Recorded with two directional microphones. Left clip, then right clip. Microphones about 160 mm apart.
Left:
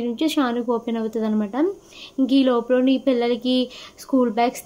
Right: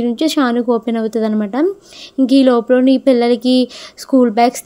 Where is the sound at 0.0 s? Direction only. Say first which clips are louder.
Right 7 dB; 45° right (ahead or behind).